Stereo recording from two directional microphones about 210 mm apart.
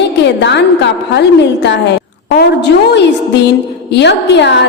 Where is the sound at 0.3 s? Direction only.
55° left (ahead or behind).